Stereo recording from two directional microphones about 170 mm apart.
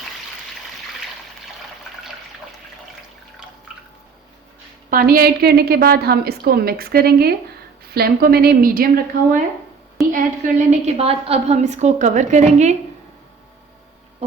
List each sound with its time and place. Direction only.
4.9 s a woman's voice: 60° right (ahead or behind)
10.1 s a woman's voice: 50° right (ahead or behind)